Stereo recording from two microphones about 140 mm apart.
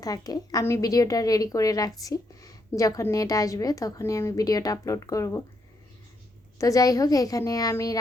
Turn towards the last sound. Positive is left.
turn(degrees=25)  # may be behind; listen again after turning